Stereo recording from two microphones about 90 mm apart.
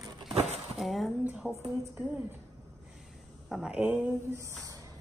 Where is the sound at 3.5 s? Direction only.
10° right (ahead or behind).